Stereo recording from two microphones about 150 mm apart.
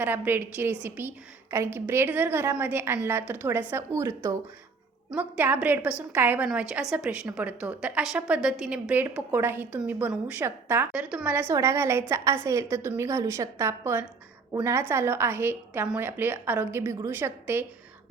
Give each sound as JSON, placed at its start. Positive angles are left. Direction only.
{"t": 0.0, "sound": "a woman's voice", "side_deg": -15}